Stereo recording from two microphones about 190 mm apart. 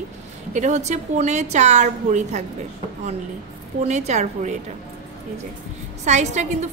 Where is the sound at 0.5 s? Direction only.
40° right (ahead or behind).